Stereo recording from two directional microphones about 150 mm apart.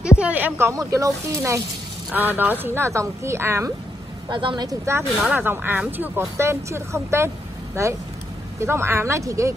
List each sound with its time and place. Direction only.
0.2 s speech: 10° right (ahead or behind)
4.3 s speech: 35° right (ahead or behind)